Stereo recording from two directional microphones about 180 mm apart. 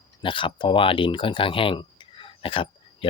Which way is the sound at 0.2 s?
30° left (ahead or behind).